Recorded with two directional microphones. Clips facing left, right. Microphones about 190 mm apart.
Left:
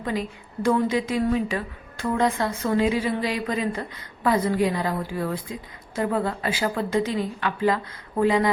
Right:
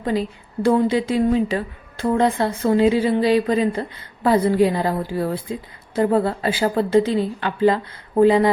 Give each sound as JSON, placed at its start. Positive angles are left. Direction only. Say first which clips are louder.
{"t": 0.0, "sound": "a woman's voice", "louder": "right 5 dB", "side_deg": -30}